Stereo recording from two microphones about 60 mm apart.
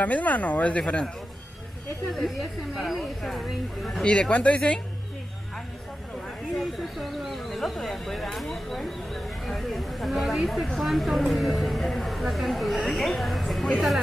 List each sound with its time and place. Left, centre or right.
0.0 s speech: left
2.1 s speech: centre
4.0 s speech: centre
7.0 s speech: centre